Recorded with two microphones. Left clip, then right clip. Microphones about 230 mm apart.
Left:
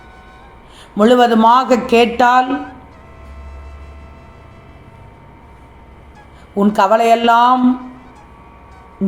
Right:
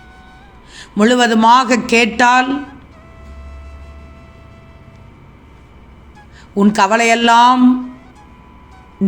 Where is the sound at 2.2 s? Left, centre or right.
Right.